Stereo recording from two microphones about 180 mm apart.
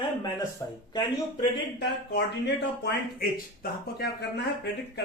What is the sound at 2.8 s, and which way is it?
Speech, 60° left (ahead or behind).